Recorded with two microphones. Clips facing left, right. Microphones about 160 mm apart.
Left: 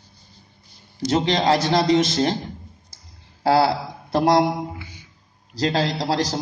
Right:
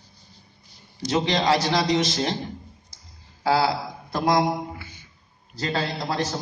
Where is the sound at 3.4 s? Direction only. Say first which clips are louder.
Left 4 dB; 65° left (ahead or behind).